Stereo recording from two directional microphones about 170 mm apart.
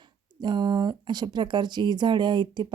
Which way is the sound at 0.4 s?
25° right (ahead or behind).